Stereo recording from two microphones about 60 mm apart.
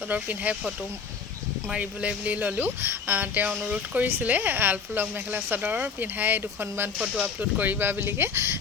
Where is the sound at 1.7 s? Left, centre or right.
Right.